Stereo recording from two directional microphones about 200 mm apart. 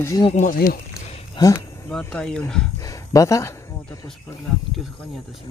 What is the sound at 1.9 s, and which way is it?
Speech, 5° left (ahead or behind).